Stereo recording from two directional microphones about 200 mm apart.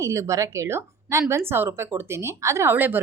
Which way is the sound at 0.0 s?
15° right (ahead or behind).